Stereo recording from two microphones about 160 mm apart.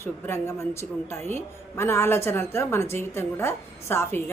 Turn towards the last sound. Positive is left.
turn(degrees=15)  # may be behind; listen again after turning